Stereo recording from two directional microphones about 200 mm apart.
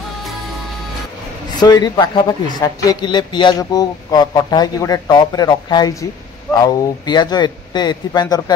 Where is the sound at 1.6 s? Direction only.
20° left (ahead or behind).